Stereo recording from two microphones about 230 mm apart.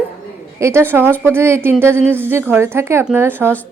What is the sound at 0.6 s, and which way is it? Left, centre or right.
A woman's voice, centre.